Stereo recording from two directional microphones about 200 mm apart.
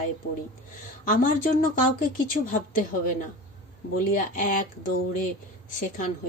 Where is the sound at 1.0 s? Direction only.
45° left (ahead or behind).